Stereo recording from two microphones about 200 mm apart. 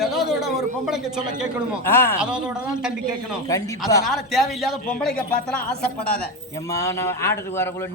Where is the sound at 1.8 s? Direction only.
10° left (ahead or behind).